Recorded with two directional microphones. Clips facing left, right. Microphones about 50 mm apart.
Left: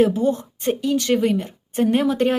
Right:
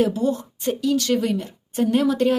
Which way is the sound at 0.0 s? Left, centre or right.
Left.